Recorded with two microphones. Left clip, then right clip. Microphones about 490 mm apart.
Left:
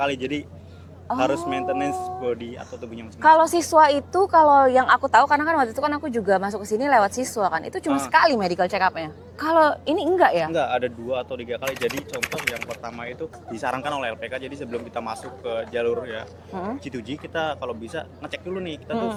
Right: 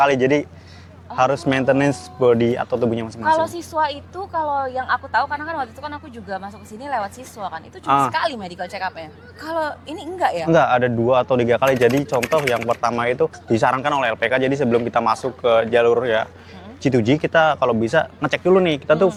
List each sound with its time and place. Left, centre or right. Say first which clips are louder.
0.0 s speech: right 9 dB; right
3.2 s a woman's voice: left 4 dB; left
7.9 s speech: right 10 dB; right
8.1 s a woman's voice: left 5 dB; left
10.5 s speech: right 8 dB; right
11.9 s speech: right 10 dB; centre
12.8 s speech: right 14 dB; right